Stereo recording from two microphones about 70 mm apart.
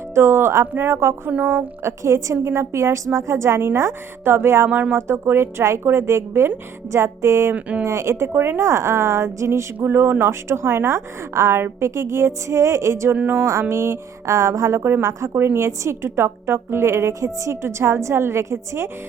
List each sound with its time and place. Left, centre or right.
0.1 s a woman's voice: right
0.7 s speech: right
0.9 s a woman's voice: right
4.7 s speech: right
4.9 s a woman's voice: right
7.5 s speech: right
7.9 s a woman's voice: right
8.3 s a woman's voice: right
8.6 s a woman's voice: right
9.7 s a woman's voice: right
13.1 s speech: right
13.4 s a woman's voice: right